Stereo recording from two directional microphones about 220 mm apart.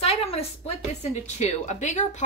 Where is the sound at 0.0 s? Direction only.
25° left (ahead or behind).